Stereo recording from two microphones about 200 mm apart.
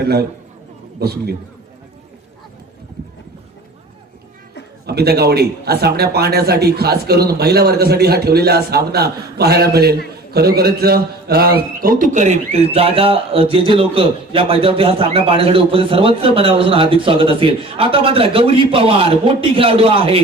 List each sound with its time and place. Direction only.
0.0 s a man's voice: 50° right (ahead or behind)
4.9 s a man's voice: 55° right (ahead or behind); by 20.2 s 25° right (ahead or behind)